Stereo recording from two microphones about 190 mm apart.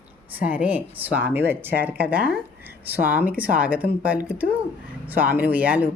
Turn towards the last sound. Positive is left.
turn(degrees=-10)  # may be behind; listen again after turning